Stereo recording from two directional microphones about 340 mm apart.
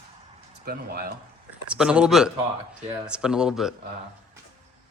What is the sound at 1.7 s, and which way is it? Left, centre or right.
Speech, centre.